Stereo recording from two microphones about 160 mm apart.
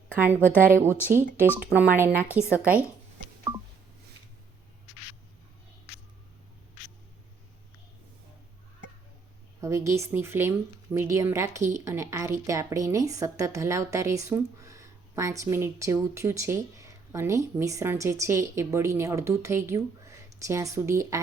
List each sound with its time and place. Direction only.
0.1 s speech: 10° right (ahead or behind)
9.6 s a woman's voice: 20° right (ahead or behind)